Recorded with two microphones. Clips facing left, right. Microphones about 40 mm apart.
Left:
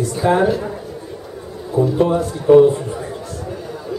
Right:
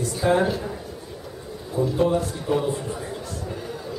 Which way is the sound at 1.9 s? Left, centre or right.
Left.